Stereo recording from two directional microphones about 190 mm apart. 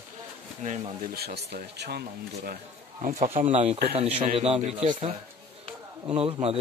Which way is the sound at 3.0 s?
35° right (ahead or behind).